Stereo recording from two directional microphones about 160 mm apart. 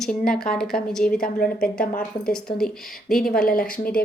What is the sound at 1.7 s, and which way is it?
Speech, 60° left (ahead or behind).